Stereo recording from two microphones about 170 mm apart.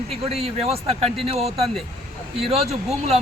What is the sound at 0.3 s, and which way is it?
Speech, 35° right (ahead or behind).